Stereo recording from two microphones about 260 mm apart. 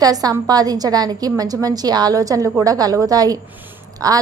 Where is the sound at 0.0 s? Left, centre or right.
Centre.